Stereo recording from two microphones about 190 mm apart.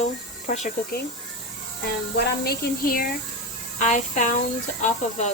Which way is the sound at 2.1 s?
55° left (ahead or behind).